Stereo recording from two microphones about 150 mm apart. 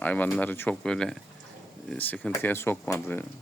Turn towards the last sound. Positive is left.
turn(degrees=15)  # may be behind; listen again after turning